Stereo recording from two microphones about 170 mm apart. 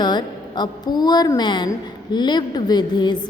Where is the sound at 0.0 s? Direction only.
25° left (ahead or behind).